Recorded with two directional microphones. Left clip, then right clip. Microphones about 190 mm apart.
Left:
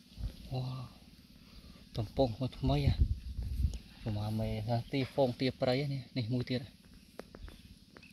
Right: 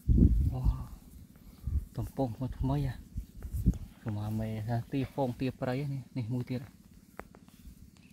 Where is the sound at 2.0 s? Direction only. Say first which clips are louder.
Left 3 dB; 30° left (ahead or behind).